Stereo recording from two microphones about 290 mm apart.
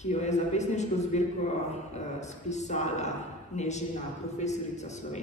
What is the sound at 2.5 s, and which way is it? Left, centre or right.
A man's voice, left.